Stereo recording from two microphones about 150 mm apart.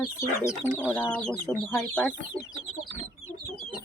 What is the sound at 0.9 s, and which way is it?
Speech, 10° left (ahead or behind).